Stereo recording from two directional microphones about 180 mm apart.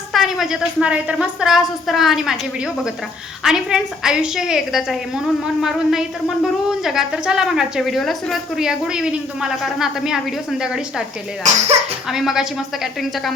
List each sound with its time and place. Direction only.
0.1 s speech: centre (ahead or behind)
11.4 s speech: 35° right (ahead or behind)
12.0 s speech: centre (ahead or behind)